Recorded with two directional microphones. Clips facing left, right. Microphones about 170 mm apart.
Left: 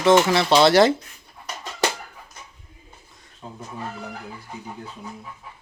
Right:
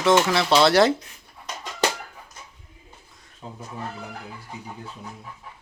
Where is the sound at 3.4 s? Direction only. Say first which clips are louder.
Even; 15° right (ahead or behind).